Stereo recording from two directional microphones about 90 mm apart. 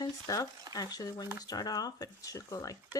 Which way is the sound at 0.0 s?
40° left (ahead or behind).